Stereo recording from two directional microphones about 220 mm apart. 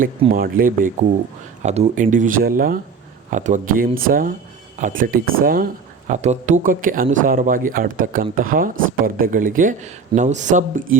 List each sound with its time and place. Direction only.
0.3 s a man's voice: 40° right (ahead or behind)